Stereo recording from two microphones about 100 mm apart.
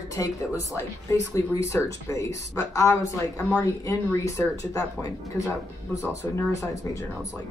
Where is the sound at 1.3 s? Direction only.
30° left (ahead or behind).